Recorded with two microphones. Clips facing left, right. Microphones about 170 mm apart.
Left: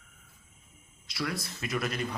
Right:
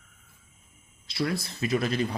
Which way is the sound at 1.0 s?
30° right (ahead or behind).